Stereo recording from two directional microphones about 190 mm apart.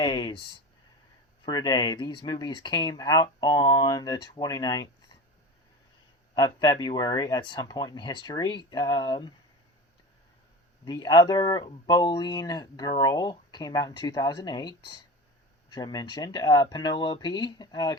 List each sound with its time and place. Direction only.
0.0 s speech: 25° left (ahead or behind)
1.5 s speech: 20° left (ahead or behind)
6.4 s speech: 20° left (ahead or behind)
10.8 s speech: 25° left (ahead or behind)